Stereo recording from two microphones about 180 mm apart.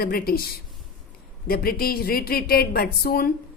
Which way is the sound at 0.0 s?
55° left (ahead or behind).